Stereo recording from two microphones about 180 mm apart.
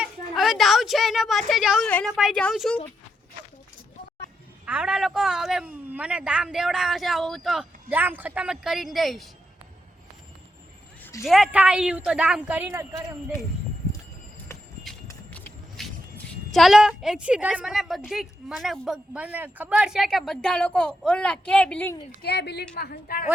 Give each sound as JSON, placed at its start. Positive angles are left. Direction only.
{"t": 0.0, "sound": "a sound", "side_deg": 0}
{"t": 1.9, "sound": "a woman's voice", "side_deg": 10}
{"t": 4.6, "sound": "speech", "side_deg": -5}
{"t": 11.2, "sound": "speech", "side_deg": 0}
{"t": 15.0, "sound": "speech", "side_deg": 10}
{"t": 22.2, "sound": "a woman's voice", "side_deg": 70}
{"t": 22.7, "sound": "a woman's voice", "side_deg": 55}